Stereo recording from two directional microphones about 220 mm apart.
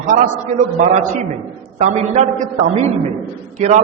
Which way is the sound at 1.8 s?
30° right (ahead or behind).